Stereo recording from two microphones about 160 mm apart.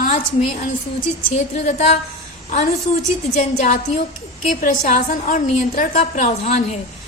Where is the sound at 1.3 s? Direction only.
45° left (ahead or behind).